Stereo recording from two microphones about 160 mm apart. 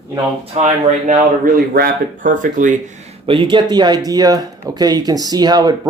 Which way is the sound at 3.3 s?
30° right (ahead or behind).